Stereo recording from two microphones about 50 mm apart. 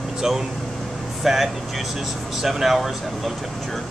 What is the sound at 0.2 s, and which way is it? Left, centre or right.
Speech, centre.